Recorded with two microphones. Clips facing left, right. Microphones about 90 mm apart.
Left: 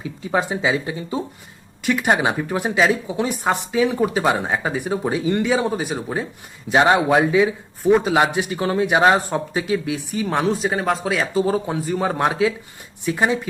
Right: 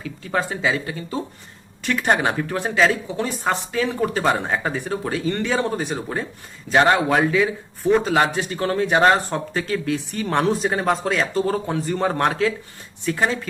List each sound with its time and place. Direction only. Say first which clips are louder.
0.0 s a man's voice: left 2 dB; 15° left (ahead or behind)